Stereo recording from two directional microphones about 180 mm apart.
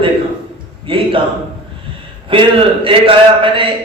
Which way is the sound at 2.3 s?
30° right (ahead or behind).